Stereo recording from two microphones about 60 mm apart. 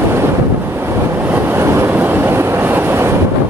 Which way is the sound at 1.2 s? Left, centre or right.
Right.